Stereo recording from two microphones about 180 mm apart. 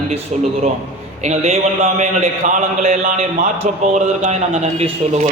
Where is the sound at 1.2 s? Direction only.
40° right (ahead or behind).